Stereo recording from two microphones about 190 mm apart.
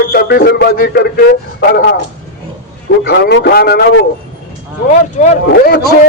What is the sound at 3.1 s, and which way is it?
Speech, 60° left (ahead or behind).